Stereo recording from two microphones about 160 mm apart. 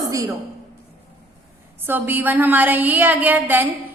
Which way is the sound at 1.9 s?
10° right (ahead or behind).